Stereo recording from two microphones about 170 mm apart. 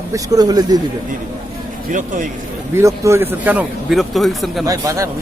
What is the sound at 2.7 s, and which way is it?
Speech, 15° right (ahead or behind).